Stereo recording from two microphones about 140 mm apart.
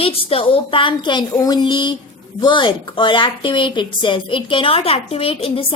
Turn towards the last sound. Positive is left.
turn(degrees=40)  # may be behind; listen again after turning